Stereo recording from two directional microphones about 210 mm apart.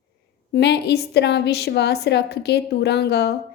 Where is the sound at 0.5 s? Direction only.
50° left (ahead or behind).